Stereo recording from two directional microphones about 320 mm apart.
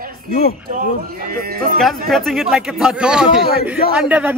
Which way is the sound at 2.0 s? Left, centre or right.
Centre.